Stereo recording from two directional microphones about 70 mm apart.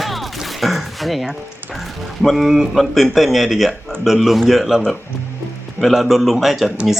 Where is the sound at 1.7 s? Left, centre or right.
Centre.